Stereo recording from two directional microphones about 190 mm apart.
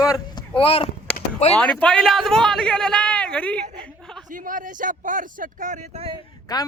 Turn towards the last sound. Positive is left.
turn(degrees=20)  # may be behind; listen again after turning